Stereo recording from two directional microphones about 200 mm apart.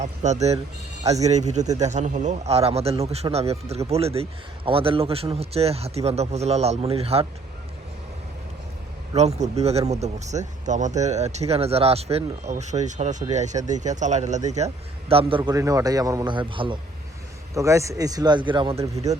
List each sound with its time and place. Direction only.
0.0 s a man's voice: 35° right (ahead or behind)
9.1 s a man's voice: 35° right (ahead or behind)
15.4 s speech: 15° right (ahead or behind)